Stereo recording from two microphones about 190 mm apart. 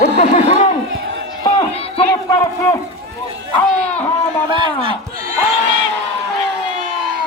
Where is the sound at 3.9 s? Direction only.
10° left (ahead or behind).